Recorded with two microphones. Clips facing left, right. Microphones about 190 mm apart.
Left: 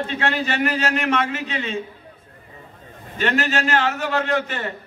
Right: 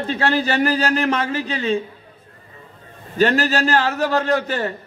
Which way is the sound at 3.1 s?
35° right (ahead or behind).